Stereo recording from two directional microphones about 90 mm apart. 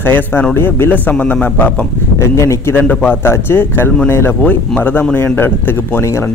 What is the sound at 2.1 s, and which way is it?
Speech, 30° left (ahead or behind).